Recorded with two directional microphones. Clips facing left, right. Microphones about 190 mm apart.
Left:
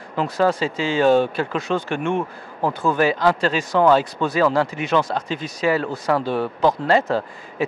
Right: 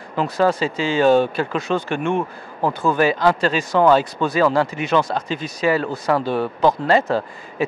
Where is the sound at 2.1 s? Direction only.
30° right (ahead or behind).